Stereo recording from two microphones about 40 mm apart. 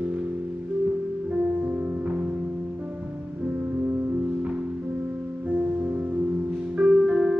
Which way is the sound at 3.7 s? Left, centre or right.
Right.